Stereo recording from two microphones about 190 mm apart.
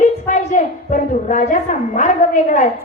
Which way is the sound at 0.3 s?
40° left (ahead or behind).